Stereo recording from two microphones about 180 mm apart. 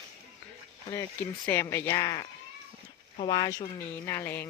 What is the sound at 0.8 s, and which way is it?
Speech, 15° left (ahead or behind).